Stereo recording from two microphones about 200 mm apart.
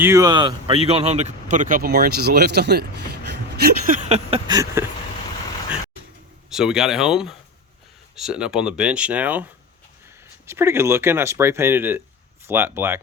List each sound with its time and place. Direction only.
0.0 s speech: 15° right (ahead or behind)
6.5 s speech: centre (ahead or behind)
10.4 s speech: 15° right (ahead or behind)